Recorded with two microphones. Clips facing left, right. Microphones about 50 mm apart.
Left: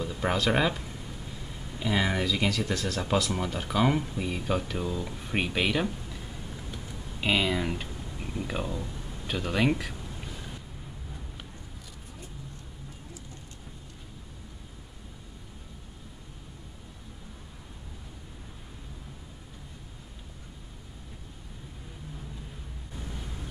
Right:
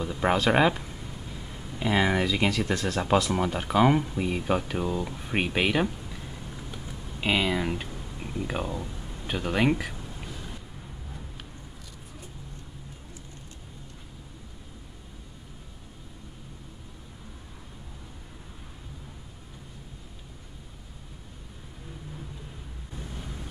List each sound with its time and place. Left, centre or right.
0.0 s speech: centre
5.0 s speech: centre
6.7 s typing: centre
9.3 s speech: centre